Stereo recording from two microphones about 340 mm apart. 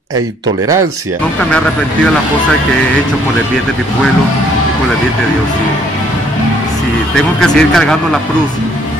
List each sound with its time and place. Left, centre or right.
7.3 s a man's voice: centre